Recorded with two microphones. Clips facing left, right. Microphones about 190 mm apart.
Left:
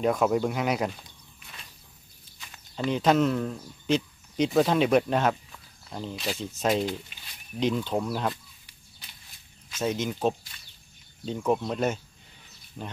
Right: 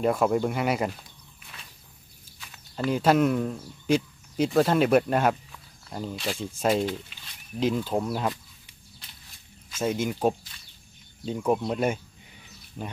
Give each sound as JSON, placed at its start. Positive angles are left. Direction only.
{"t": 0.0, "sound": "speech", "side_deg": 0}
{"t": 2.4, "sound": "speech", "side_deg": 0}
{"t": 9.7, "sound": "speech", "side_deg": -10}